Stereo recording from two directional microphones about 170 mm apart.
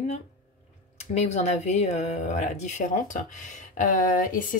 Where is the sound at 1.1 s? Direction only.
40° left (ahead or behind).